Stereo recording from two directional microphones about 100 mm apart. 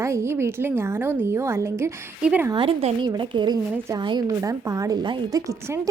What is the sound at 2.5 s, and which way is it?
Speech, 60° right (ahead or behind).